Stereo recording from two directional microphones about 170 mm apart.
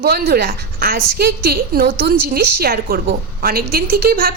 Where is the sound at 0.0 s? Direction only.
65° right (ahead or behind).